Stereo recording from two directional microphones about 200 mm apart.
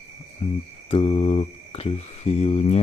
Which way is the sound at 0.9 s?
30° left (ahead or behind).